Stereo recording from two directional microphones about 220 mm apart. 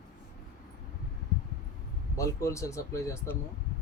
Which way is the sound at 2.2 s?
15° left (ahead or behind).